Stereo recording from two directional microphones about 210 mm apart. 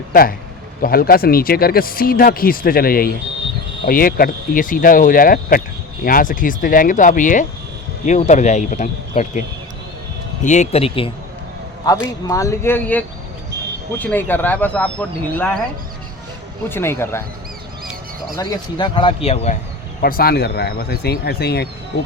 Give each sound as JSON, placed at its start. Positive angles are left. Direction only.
{"t": 0.1, "sound": "speech", "side_deg": 45}
{"t": 10.4, "sound": "speech", "side_deg": 35}
{"t": 12.3, "sound": "speech", "side_deg": 15}
{"t": 16.6, "sound": "speech", "side_deg": 10}
{"t": 18.3, "sound": "speech", "side_deg": 20}
{"t": 20.0, "sound": "speech", "side_deg": 45}